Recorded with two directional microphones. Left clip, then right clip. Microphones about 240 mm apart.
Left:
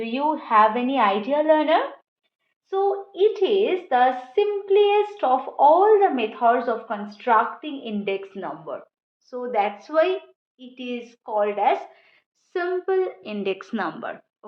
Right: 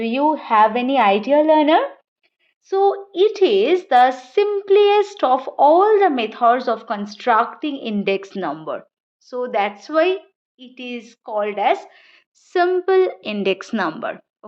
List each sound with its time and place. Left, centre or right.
0.0 s a woman's voice: right
9.2 s speech: right